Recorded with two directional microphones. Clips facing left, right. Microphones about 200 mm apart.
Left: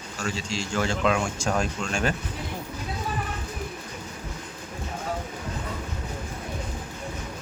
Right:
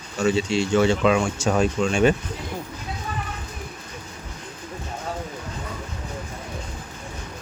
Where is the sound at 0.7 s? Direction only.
Centre (ahead or behind).